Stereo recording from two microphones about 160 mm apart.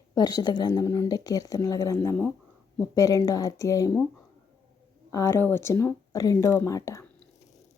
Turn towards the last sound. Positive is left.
turn(degrees=20)  # may be behind; listen again after turning